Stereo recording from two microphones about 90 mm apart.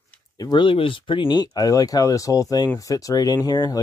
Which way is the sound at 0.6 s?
85° left.